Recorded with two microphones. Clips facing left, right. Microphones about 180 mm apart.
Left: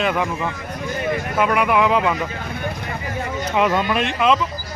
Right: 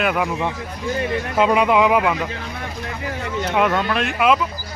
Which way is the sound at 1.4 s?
20° right (ahead or behind).